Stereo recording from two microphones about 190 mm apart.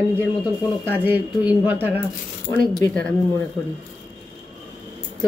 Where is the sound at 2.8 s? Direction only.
75° left (ahead or behind).